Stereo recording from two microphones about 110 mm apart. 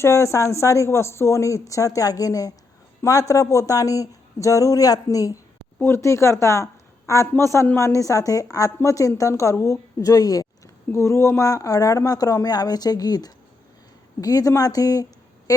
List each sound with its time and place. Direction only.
0.0 s a woman's voice: 25° left (ahead or behind)